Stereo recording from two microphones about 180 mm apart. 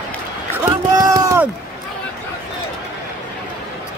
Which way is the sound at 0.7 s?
20° right (ahead or behind).